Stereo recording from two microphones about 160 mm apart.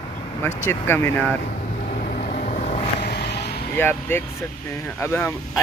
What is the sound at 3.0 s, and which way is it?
Vehicle, 85° left.